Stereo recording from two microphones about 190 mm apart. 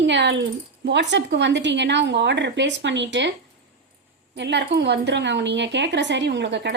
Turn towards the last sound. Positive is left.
turn(degrees=-65)  # may be behind; listen again after turning